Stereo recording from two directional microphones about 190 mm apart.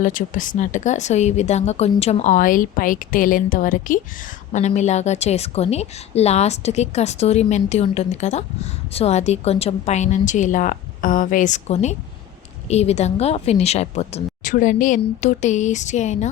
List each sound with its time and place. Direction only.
0.0 s a woman's voice: 45° left (ahead or behind)